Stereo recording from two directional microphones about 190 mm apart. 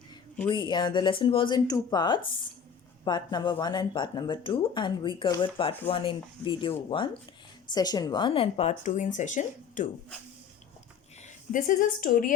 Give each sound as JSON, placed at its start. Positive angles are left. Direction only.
{"t": 0.4, "sound": "speech", "side_deg": 25}
{"t": 11.2, "sound": "a woman's voice", "side_deg": 45}